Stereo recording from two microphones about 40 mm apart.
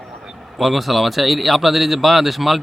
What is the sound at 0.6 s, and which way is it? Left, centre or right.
Speech, centre.